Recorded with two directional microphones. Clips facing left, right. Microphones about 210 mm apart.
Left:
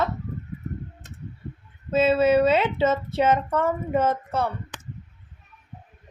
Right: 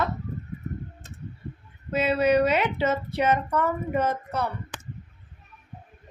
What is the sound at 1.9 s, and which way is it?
Speech, 25° left (ahead or behind).